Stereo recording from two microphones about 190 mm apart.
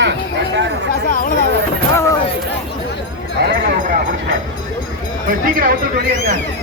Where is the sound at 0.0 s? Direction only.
65° right (ahead or behind).